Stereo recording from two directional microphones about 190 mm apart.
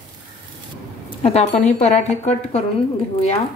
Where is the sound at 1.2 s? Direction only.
30° left (ahead or behind).